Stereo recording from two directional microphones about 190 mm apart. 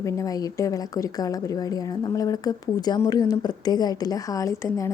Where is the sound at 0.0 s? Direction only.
20° left (ahead or behind).